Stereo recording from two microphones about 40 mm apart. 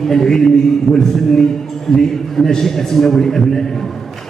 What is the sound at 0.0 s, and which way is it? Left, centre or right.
A man's voice, centre.